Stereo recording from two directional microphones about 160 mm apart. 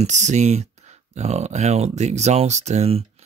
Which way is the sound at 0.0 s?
45° right (ahead or behind).